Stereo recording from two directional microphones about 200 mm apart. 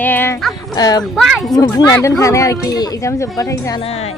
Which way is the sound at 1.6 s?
15° left (ahead or behind).